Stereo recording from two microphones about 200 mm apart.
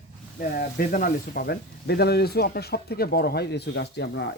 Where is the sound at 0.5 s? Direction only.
45° left (ahead or behind).